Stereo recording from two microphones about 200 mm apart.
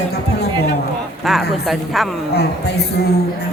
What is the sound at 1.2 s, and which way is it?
Speech, centre (ahead or behind).